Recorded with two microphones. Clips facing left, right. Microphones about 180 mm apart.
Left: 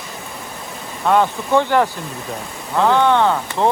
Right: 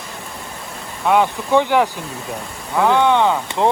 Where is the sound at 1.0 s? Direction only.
15° right (ahead or behind).